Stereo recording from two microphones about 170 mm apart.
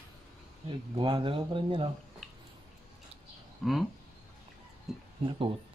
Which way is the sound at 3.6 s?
Centre (ahead or behind).